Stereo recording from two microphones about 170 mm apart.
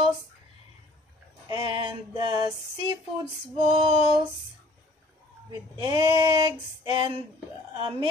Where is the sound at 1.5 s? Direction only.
30° right (ahead or behind).